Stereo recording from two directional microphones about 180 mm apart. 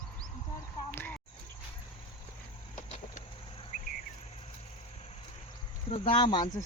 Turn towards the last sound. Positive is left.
turn(degrees=25)  # may be behind; listen again after turning